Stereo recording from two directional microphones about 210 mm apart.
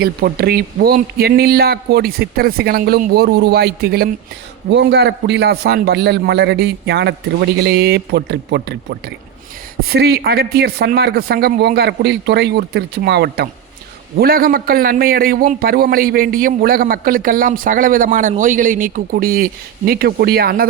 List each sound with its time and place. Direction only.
0.0 s a man's voice: 50° right (ahead or behind)
9.9 s a man's voice: 50° right (ahead or behind)